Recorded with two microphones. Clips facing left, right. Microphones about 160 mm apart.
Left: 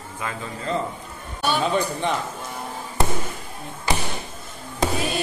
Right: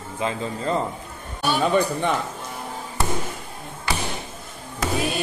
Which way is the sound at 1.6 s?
55° right (ahead or behind).